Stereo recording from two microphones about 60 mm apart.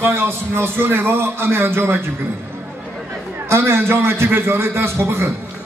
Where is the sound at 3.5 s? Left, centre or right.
Right.